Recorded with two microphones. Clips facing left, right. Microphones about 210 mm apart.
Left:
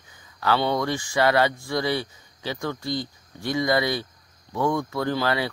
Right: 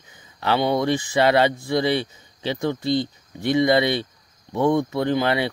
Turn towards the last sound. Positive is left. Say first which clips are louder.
# right 4 dB
turn(degrees=-20)  # may be behind; listen again after turning